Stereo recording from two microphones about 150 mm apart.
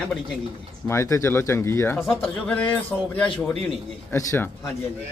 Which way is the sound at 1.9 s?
Centre (ahead or behind).